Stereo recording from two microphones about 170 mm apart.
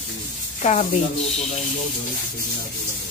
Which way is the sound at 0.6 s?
45° left (ahead or behind).